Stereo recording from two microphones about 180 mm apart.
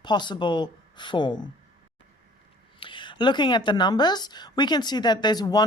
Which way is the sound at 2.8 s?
25° left (ahead or behind).